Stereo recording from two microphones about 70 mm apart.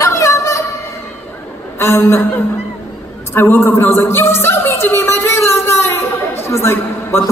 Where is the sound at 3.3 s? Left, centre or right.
Left.